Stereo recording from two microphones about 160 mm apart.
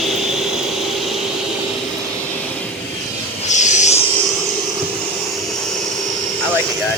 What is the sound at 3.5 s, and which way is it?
Vehicle, 50° left (ahead or behind).